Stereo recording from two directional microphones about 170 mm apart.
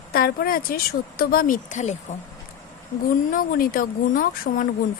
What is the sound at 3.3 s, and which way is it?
Speech, 55° left (ahead or behind).